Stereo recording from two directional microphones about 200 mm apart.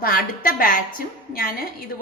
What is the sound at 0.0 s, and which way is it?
A woman's voice, 45° left (ahead or behind).